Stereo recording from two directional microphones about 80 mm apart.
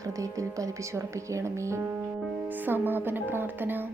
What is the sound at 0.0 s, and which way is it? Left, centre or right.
Speech, right.